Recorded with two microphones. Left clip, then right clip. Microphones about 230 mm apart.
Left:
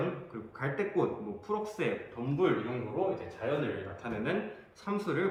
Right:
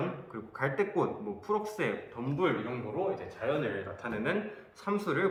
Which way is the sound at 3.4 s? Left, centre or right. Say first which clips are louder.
Right 2 dB; centre.